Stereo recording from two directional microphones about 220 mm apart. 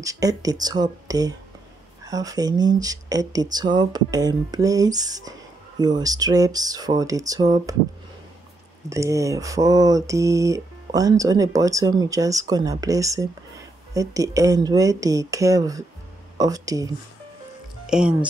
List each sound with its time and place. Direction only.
0.0 s speech: 15° right (ahead or behind)
8.8 s speech: 15° right (ahead or behind)
17.8 s speech: 5° right (ahead or behind)